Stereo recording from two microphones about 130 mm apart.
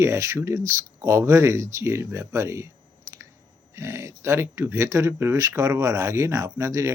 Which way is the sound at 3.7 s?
20° right (ahead or behind).